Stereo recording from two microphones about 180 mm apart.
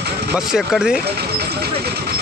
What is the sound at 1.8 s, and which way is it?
Vehicle, 65° right (ahead or behind).